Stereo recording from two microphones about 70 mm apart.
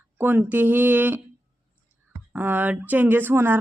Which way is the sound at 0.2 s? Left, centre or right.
Right.